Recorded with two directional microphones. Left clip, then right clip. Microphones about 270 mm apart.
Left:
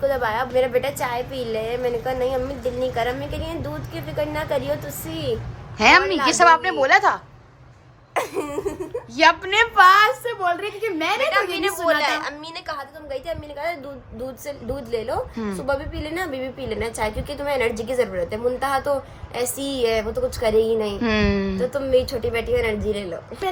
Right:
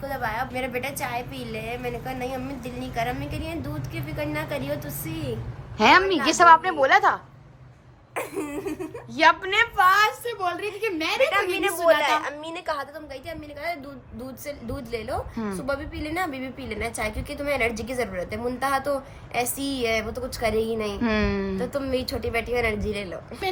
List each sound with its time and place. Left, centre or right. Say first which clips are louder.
0.0 s a woman's voice: left 7 dB; centre
5.7 s a woman's voice: left 2 dB; centre
8.1 s cough: left 6 dB; left
8.6 s a woman's voice: left 5 dB; centre
9.7 s a woman's voice: left 7 dB; left
10.0 s a woman's voice: left 4 dB; centre